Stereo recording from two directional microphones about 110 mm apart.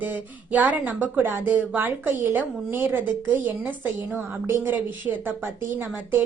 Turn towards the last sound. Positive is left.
turn(degrees=-20)  # may be behind; listen again after turning